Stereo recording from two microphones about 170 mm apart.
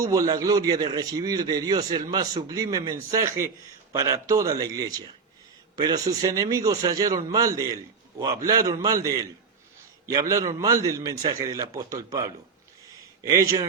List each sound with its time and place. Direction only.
0.0 s a man's voice: 20° right (ahead or behind)